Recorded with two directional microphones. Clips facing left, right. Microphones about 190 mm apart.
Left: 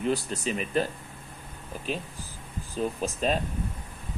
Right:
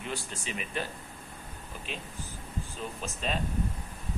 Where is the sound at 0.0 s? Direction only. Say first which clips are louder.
Left 10 dB; 40° left (ahead or behind).